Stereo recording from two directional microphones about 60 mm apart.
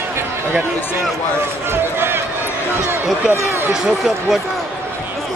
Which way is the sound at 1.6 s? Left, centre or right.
Right.